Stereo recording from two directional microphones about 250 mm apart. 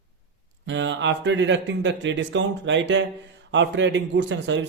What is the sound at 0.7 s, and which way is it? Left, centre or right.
Speech, right.